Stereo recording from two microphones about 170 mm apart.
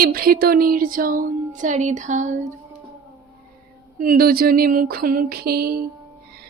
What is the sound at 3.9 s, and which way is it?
Speech, 55° right (ahead or behind).